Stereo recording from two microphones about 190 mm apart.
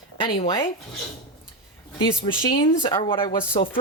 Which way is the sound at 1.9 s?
25° left (ahead or behind).